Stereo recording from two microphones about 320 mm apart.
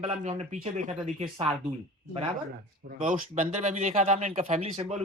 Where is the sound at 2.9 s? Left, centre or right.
Right.